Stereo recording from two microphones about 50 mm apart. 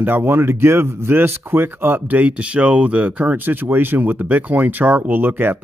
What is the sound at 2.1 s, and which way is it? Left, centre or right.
Speech, right.